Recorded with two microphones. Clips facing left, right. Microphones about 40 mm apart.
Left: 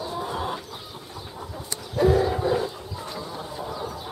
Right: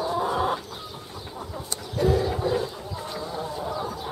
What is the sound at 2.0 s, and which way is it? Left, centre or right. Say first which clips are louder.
Bow-wow: left 3 dB; centre.